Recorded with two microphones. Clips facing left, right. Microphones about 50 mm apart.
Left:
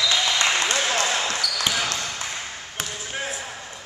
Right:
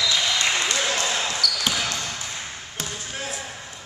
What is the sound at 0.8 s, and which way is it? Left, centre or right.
Basketball bounce, left.